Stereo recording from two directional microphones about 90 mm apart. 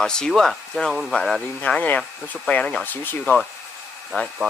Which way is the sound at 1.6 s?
15° left (ahead or behind).